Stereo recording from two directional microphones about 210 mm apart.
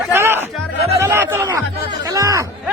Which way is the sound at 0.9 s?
10° right (ahead or behind).